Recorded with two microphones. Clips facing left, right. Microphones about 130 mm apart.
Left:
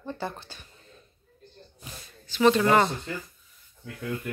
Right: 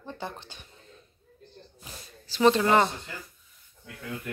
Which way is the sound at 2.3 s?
30° right (ahead or behind).